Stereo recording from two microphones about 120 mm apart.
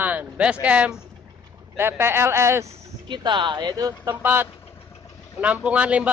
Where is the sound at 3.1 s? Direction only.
40° right (ahead or behind).